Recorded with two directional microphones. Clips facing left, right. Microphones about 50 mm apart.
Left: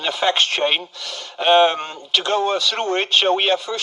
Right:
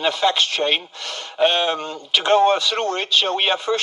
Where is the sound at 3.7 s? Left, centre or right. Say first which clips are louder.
Right 5 dB; right.